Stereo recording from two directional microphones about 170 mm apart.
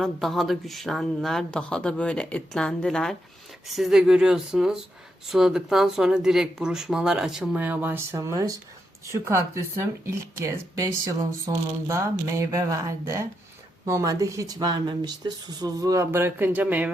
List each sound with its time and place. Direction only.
0.0 s speech: centre (ahead or behind)